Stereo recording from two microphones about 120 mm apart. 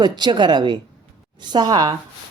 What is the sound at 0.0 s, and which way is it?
A woman's voice, 40° right (ahead or behind).